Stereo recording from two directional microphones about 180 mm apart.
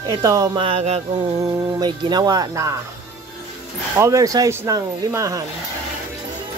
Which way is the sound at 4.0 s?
20° right (ahead or behind).